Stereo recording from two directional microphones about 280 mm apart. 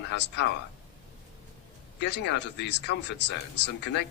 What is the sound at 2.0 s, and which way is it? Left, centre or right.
Speech, left.